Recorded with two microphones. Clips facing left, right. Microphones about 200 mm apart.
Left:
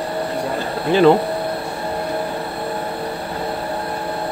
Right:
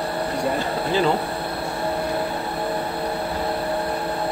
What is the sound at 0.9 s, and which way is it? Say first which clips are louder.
Speech: left 9 dB; 65° left (ahead or behind).